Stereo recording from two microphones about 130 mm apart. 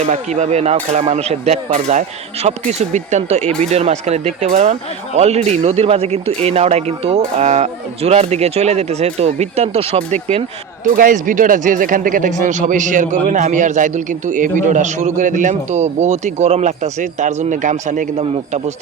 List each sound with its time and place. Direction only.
0.0 s speech: 60° right (ahead or behind)
10.9 s speech: 90° right; by 18.1 s 70° right (ahead or behind)